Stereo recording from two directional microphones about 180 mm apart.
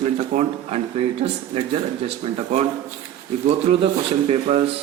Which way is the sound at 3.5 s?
35° right (ahead or behind).